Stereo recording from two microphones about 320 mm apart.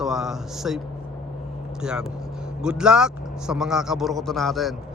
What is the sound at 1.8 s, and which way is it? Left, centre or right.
Speech, centre.